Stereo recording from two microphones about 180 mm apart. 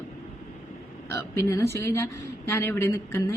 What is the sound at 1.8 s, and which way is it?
A woman's voice, 15° left (ahead or behind).